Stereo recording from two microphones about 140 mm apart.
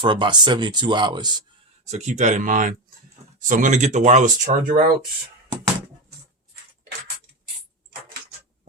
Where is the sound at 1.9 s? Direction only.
55° right (ahead or behind).